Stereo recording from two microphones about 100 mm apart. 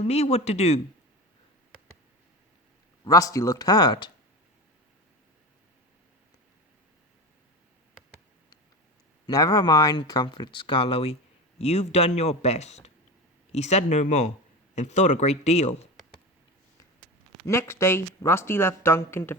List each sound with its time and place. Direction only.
0.0 s speech: 90° left
3.0 s speech: 35° left (ahead or behind)
9.2 s speech: 40° left (ahead or behind); by 15.6 s 90° left
17.4 s speech: 25° left (ahead or behind)